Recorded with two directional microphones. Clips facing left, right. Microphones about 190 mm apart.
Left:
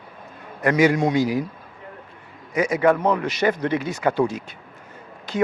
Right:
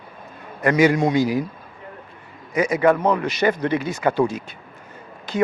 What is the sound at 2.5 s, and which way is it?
Speech, 15° right (ahead or behind).